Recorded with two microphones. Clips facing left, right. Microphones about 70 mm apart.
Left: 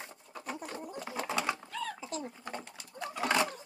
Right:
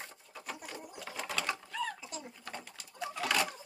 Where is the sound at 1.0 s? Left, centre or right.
Left.